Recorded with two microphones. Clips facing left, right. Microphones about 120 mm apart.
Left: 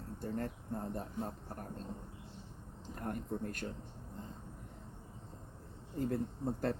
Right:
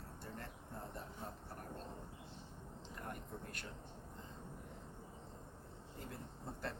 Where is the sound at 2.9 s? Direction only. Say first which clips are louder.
Left 9 dB; 45° left (ahead or behind).